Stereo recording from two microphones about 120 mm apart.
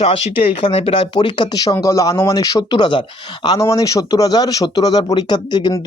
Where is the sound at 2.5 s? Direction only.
40° left (ahead or behind).